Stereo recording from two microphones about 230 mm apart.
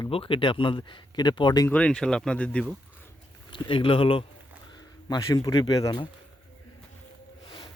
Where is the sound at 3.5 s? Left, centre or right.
Left.